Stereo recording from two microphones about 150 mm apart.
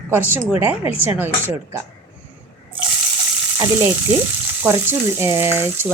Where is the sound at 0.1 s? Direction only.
15° right (ahead or behind).